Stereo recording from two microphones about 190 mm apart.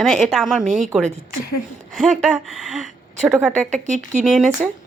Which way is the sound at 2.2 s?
Centre (ahead or behind).